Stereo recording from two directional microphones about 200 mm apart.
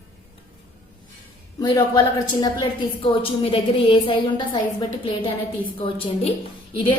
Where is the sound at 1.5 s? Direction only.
15° left (ahead or behind).